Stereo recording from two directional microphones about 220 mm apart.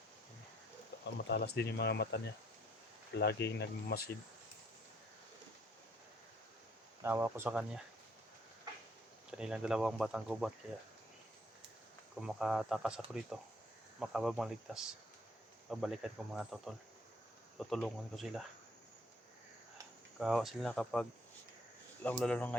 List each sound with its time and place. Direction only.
1.0 s speech: 50° left (ahead or behind)
3.4 s speech: 50° left (ahead or behind)
7.0 s speech: 10° right (ahead or behind)
9.4 s speech: 5° right (ahead or behind)
12.1 s speech: centre (ahead or behind)
14.0 s speech: centre (ahead or behind)
20.1 s speech: centre (ahead or behind)